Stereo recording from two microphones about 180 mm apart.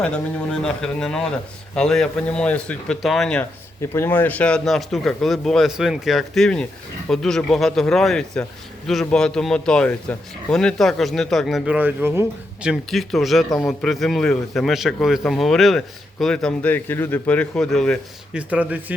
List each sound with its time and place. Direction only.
0.0 s speech: 5° left (ahead or behind)
3.8 s speech: 15° left (ahead or behind); by 12.2 s 10° right (ahead or behind)
12.6 s a man's voice: centre (ahead or behind)
18.3 s speech: 5° right (ahead or behind)